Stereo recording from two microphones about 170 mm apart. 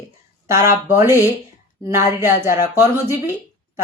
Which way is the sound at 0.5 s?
15° right (ahead or behind).